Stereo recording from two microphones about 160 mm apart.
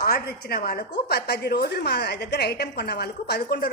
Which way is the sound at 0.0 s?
90° left.